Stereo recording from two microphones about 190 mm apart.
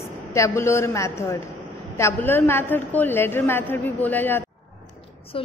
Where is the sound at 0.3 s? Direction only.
15° left (ahead or behind).